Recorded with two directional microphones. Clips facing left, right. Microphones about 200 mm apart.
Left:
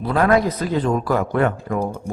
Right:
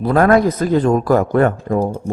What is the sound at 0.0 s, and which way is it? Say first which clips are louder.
A man's voice: right 5 dB; 45° right (ahead or behind).